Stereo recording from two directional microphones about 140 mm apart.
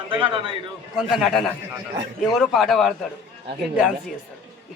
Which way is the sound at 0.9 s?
Centre (ahead or behind).